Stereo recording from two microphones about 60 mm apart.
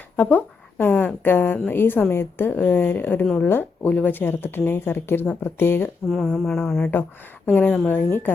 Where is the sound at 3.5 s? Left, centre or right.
Left.